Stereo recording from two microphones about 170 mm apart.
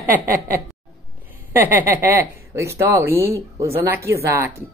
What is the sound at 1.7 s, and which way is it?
Speech, 15° right (ahead or behind).